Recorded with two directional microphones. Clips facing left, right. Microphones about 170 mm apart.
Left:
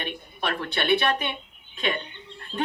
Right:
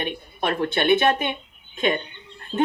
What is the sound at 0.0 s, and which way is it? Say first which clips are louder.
Speech: right 5 dB; 40° right (ahead or behind).